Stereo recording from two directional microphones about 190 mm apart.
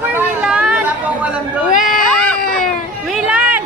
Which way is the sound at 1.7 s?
45° left (ahead or behind).